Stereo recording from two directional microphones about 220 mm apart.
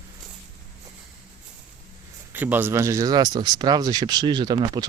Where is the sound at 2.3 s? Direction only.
10° right (ahead or behind).